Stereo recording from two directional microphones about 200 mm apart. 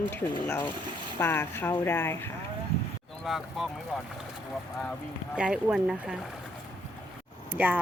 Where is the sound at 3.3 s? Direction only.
Centre (ahead or behind).